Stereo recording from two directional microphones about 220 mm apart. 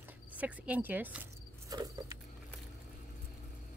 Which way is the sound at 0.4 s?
5° right (ahead or behind).